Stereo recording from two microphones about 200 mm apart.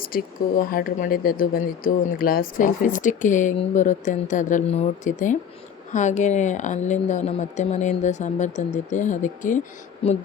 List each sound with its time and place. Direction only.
0.0 s speech: 45° left (ahead or behind); by 10.2 s 30° left (ahead or behind)